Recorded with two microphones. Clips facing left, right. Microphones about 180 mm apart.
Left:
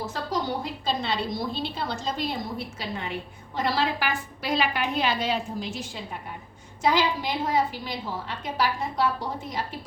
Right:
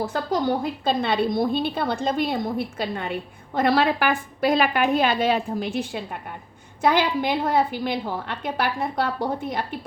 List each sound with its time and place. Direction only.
0.0 s a woman's voice: 55° right (ahead or behind)